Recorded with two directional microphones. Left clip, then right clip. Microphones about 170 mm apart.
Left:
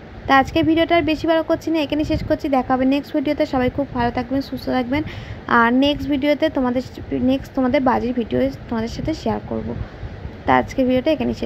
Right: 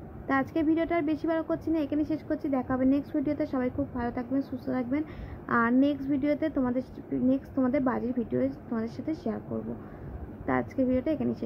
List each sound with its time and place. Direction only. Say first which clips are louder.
0.3 s speech: left 12 dB; 25° left (ahead or behind)
10.4 s speech: left 12 dB; 25° left (ahead or behind)